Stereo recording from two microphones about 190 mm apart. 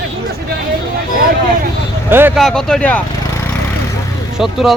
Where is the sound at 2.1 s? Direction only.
10° right (ahead or behind).